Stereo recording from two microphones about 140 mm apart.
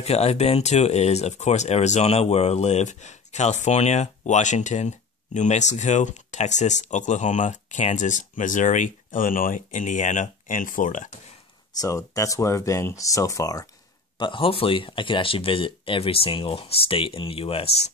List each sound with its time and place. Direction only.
0.0 s speech: 50° left (ahead or behind); by 11.1 s 70° left (ahead or behind)
11.8 s speech: 25° left (ahead or behind)
14.1 s speech: 35° left (ahead or behind)